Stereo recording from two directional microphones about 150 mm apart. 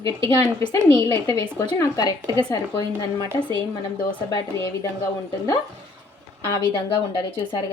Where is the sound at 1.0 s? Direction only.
25° left (ahead or behind).